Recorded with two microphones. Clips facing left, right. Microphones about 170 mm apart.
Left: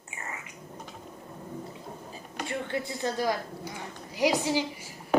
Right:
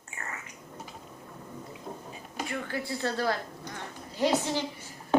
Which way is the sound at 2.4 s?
20° left (ahead or behind).